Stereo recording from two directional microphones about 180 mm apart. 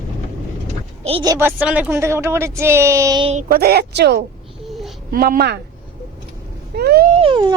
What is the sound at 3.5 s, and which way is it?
Speech, 60° right (ahead or behind).